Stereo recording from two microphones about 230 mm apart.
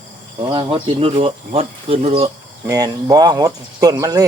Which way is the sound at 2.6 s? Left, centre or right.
Centre.